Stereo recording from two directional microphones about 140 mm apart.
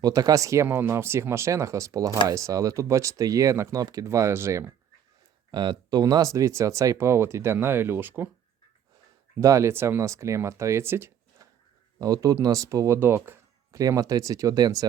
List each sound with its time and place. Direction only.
0.0 s speech: 25° right (ahead or behind)
5.5 s speech: 30° right (ahead or behind); by 8.3 s 15° right (ahead or behind)
9.4 s speech: 20° right (ahead or behind)